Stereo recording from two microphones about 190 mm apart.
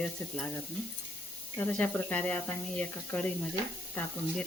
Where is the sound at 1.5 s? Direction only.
10° left (ahead or behind).